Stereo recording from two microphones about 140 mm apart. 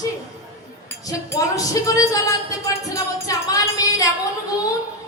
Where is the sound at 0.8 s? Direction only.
25° left (ahead or behind).